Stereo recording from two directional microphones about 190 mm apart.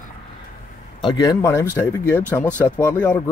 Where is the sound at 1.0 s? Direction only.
20° left (ahead or behind).